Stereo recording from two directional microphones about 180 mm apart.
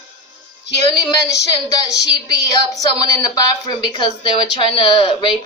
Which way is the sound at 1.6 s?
20° left (ahead or behind).